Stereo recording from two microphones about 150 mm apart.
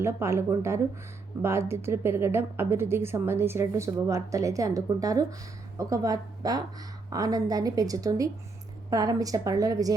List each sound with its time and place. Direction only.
0.0 s a woman's voice: 20° right (ahead or behind)